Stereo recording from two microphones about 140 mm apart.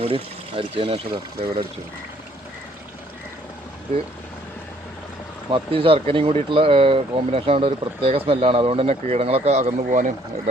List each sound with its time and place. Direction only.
0.0 s speech: 40° right (ahead or behind)
5.5 s speech: 40° right (ahead or behind); by 10.5 s 55° right (ahead or behind)